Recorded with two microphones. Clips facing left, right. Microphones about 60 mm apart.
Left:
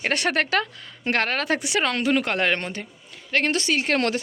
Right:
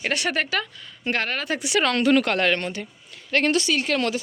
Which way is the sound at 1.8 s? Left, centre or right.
Centre.